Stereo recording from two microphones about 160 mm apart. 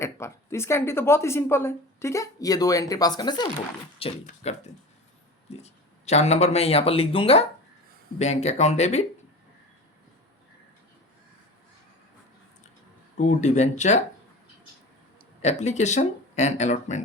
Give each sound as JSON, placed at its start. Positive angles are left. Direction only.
{"t": 0.0, "sound": "a woman's voice", "side_deg": 15}
{"t": 13.1, "sound": "speech", "side_deg": 45}
{"t": 15.4, "sound": "speech", "side_deg": 45}